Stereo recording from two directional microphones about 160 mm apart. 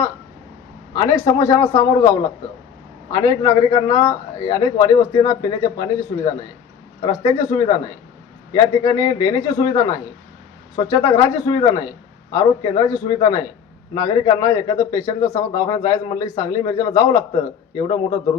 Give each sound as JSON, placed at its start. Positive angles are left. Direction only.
{"t": 0.9, "sound": "a man's voice", "side_deg": 25}
{"t": 7.0, "sound": "a man's voice", "side_deg": 25}